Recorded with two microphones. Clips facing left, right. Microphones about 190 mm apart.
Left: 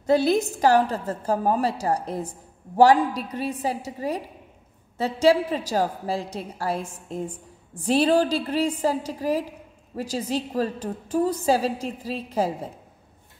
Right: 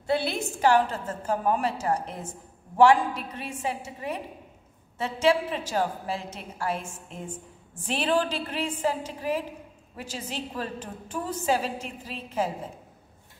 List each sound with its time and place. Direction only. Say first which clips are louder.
0.0 s a woman's voice: left 7 dB; 40° left (ahead or behind)